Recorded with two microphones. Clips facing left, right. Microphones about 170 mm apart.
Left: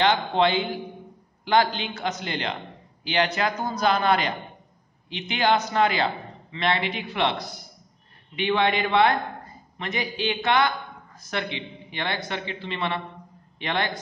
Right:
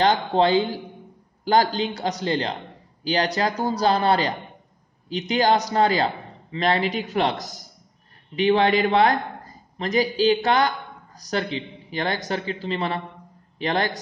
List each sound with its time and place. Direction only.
0.0 s a man's voice: 40° right (ahead or behind)